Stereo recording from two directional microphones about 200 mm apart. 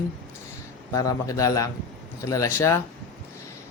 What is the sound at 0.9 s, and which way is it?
Speech, 15° left (ahead or behind).